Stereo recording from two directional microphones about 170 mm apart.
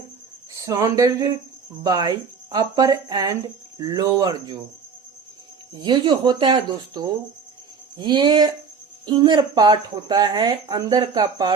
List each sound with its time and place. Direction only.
0.5 s speech: 20° right (ahead or behind)
5.8 s speech: 25° right (ahead or behind)